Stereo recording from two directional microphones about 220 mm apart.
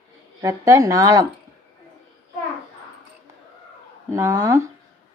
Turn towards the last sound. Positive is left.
turn(degrees=-15)  # may be behind; listen again after turning